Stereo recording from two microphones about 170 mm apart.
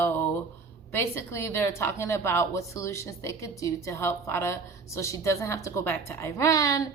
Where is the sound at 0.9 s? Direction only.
15° left (ahead or behind).